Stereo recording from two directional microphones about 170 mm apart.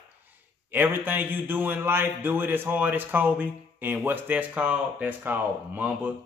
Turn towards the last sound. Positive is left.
turn(degrees=-10)  # may be behind; listen again after turning